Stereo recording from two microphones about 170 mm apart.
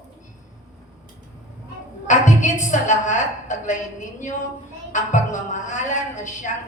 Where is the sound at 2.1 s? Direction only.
45° left (ahead or behind).